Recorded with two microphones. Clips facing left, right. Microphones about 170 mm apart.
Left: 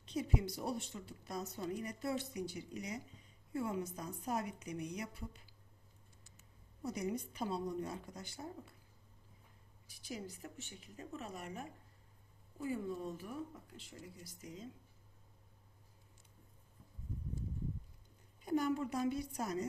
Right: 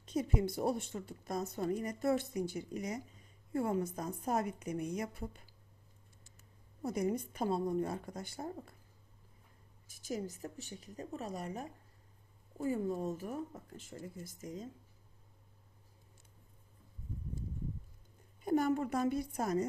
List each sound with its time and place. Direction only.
0.0 s a woman's voice: 45° right (ahead or behind)
6.8 s a woman's voice: 50° right (ahead or behind)
9.8 s a woman's voice: 45° right (ahead or behind)
18.4 s a woman's voice: 50° right (ahead or behind)